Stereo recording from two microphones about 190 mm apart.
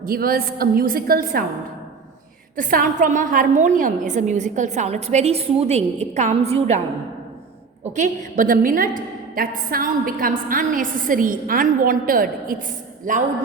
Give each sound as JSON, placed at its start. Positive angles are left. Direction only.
{"t": 0.0, "sound": "a woman's voice", "side_deg": -50}
{"t": 2.6, "sound": "a woman's voice", "side_deg": -45}
{"t": 7.9, "sound": "a woman's voice", "side_deg": -45}